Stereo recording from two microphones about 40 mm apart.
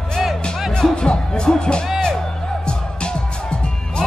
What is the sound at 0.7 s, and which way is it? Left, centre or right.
Music, centre.